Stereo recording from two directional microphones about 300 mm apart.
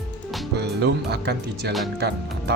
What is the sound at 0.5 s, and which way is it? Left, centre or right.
Speech, right.